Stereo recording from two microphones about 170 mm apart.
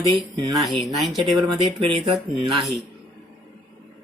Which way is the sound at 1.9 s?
30° right (ahead or behind).